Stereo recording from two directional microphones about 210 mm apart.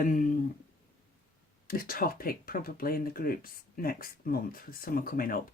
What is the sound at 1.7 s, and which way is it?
Speech, 45° left (ahead or behind).